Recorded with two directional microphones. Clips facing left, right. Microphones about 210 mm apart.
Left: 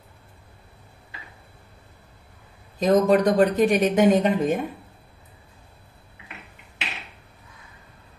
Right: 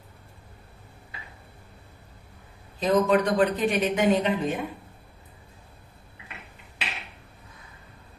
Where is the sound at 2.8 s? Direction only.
40° left (ahead or behind).